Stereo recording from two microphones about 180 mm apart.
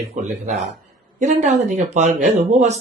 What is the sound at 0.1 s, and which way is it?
Speech, 40° right (ahead or behind).